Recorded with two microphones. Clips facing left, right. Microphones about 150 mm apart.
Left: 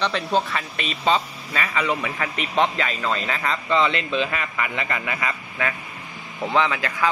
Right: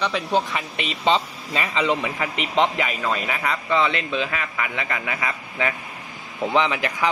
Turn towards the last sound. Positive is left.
turn(degrees=-20)  # may be behind; listen again after turning